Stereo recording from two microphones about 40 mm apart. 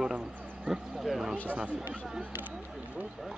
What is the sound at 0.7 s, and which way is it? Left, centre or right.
Speech, centre.